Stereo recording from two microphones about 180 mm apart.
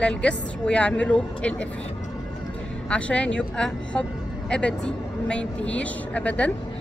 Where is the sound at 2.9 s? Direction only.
5° left (ahead or behind).